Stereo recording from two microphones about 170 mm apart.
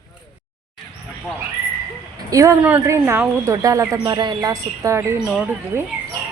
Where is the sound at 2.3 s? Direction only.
20° right (ahead or behind).